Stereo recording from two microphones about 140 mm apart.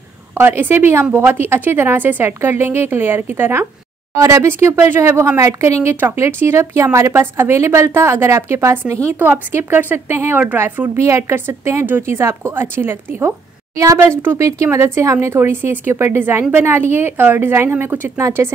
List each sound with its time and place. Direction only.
0.3 s a woman's voice: 15° right (ahead or behind)